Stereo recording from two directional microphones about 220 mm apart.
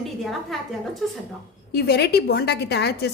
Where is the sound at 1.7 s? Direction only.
45° left (ahead or behind).